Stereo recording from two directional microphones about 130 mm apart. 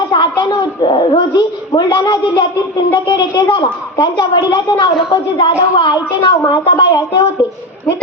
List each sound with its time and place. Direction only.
0.1 s a woman's voice: 35° left (ahead or behind)